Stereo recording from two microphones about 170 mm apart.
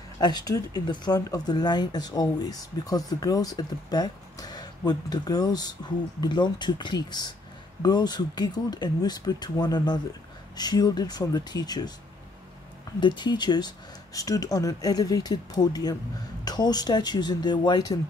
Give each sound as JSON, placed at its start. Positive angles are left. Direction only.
{"t": 0.2, "sound": "speech", "side_deg": 25}
{"t": 13.0, "sound": "speech", "side_deg": 25}